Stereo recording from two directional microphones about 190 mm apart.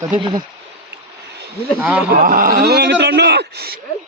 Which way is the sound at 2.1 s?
50° right (ahead or behind).